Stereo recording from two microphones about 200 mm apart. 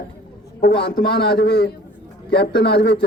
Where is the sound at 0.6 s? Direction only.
50° left (ahead or behind).